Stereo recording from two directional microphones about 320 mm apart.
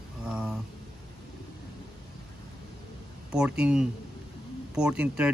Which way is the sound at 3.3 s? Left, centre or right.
Centre.